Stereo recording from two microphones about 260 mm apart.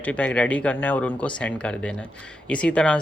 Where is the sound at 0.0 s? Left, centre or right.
Centre.